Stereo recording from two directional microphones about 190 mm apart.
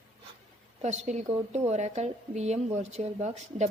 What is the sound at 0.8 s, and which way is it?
Speech, 35° right (ahead or behind).